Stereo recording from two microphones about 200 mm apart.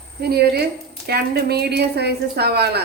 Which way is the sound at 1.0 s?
55° right (ahead or behind).